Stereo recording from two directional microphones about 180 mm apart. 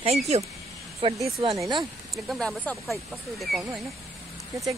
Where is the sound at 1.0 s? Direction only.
30° right (ahead or behind).